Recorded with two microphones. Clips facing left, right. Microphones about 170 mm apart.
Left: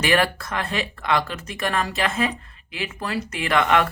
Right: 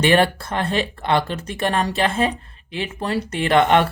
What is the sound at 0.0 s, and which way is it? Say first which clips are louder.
Speech: right 4 dB; 30° right (ahead or behind).